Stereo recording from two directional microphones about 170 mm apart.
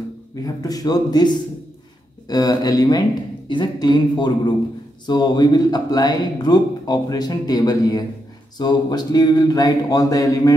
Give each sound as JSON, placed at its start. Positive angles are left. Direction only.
{"t": 0.6, "sound": "speech", "side_deg": 20}